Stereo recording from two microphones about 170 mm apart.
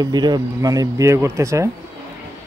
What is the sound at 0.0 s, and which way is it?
A woman's voice, 25° right (ahead or behind).